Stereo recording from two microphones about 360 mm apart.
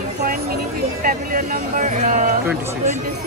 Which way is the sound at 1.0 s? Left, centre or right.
Right.